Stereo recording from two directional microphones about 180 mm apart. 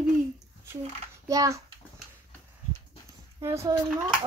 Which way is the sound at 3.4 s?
15° right (ahead or behind).